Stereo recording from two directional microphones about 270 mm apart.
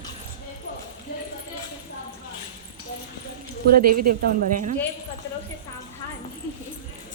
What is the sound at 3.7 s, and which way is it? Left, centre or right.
Speech, right.